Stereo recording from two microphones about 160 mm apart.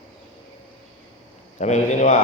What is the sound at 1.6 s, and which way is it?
Speech, 45° left (ahead or behind).